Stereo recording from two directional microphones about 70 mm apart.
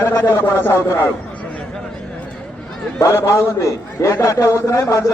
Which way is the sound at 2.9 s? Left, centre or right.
Left.